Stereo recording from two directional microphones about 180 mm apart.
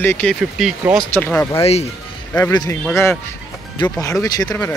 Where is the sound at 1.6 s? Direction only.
35° left (ahead or behind).